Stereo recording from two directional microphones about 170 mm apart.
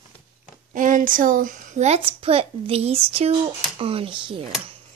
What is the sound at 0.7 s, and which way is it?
A woman's voice, 50° right (ahead or behind).